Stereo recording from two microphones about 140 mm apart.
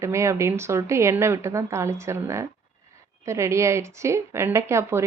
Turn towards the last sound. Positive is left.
turn(degrees=-20)  # may be behind; listen again after turning